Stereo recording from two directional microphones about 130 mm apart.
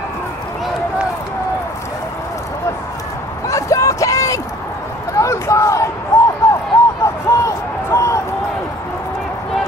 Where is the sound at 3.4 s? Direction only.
25° left (ahead or behind).